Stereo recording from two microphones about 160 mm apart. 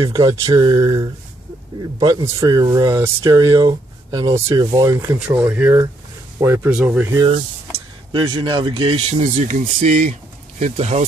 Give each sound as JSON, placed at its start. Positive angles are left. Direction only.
{"t": 0.0, "sound": "speech", "side_deg": -25}
{"t": 5.3, "sound": "speech", "side_deg": -10}
{"t": 8.1, "sound": "speech", "side_deg": -30}